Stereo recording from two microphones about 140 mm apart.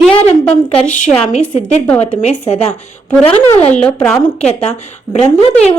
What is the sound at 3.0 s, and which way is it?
Speech, 10° left (ahead or behind).